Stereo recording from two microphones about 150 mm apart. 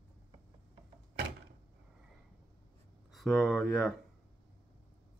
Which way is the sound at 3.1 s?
Centre (ahead or behind).